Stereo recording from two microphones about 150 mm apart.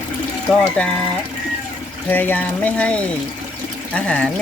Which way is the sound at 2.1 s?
10° left (ahead or behind).